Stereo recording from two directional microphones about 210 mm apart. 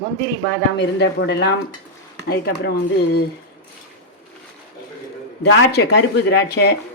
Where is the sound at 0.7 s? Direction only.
55° left (ahead or behind).